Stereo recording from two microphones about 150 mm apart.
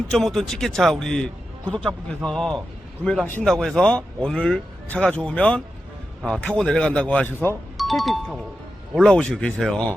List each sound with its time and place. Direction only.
0.1 s a man's voice: 5° left (ahead or behind)